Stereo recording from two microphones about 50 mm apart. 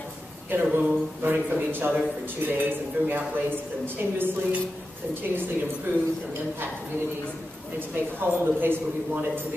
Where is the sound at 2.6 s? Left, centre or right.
Right.